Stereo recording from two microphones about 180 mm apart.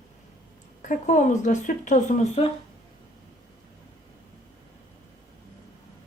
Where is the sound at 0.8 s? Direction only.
45° left (ahead or behind).